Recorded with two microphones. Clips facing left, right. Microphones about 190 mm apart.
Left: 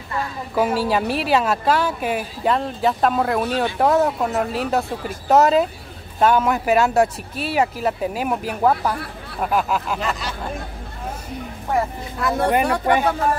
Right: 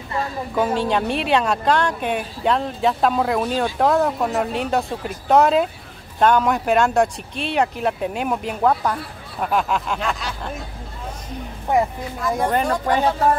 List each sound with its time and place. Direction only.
0.6 s speech: 5° left (ahead or behind)
12.2 s speech: 70° left (ahead or behind)